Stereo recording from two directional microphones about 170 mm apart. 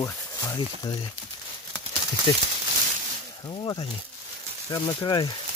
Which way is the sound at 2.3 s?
25° left (ahead or behind).